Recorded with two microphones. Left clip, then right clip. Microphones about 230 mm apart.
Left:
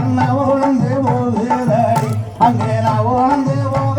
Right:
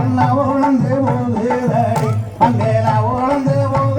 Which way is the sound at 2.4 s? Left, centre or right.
Left.